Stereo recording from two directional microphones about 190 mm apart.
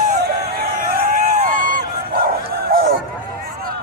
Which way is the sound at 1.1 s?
40° right (ahead or behind).